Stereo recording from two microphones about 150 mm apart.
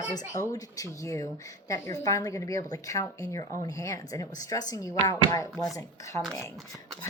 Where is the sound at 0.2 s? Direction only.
20° left (ahead or behind).